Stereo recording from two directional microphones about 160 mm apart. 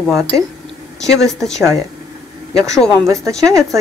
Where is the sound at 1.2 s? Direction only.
Centre (ahead or behind).